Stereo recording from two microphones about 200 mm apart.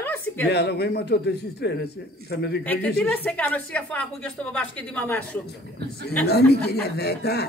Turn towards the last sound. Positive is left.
turn(degrees=55)  # may be behind; listen again after turning